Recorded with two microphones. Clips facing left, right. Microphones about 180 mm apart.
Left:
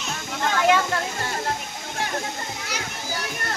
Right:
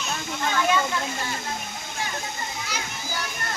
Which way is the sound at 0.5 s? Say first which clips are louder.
Left 4 dB; 70° left (ahead or behind).